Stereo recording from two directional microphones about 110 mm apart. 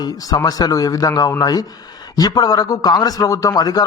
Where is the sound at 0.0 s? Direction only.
35° left (ahead or behind).